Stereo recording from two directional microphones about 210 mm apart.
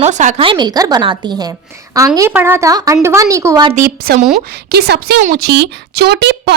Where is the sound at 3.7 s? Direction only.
45° right (ahead or behind).